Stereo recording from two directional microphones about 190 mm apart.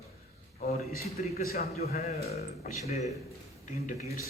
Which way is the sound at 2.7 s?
40° left (ahead or behind).